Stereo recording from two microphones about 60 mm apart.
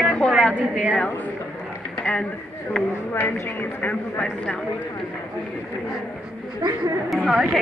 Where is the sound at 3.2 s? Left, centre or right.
Left.